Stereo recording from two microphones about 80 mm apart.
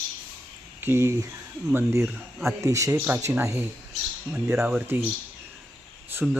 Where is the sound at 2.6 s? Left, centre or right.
Right.